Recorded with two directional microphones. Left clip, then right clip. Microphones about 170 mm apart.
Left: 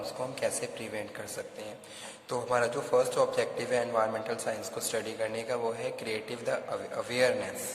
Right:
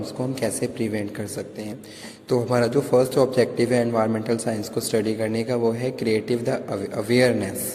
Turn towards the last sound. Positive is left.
turn(degrees=-30)  # may be behind; listen again after turning